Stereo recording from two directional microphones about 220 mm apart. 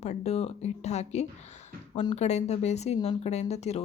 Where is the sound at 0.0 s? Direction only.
30° left (ahead or behind).